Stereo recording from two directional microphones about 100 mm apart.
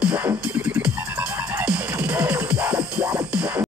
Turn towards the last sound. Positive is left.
turn(degrees=-15)  # may be behind; listen again after turning